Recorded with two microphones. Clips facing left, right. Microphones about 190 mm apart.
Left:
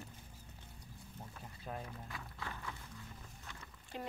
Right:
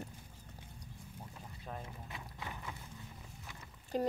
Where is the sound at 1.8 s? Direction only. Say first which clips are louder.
Even; 20° right (ahead or behind).